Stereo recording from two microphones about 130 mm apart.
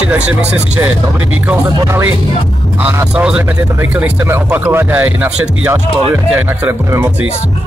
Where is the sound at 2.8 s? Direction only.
10° right (ahead or behind).